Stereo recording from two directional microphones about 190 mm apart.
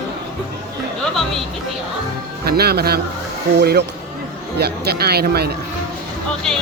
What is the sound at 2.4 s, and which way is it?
Speech, 55° right (ahead or behind).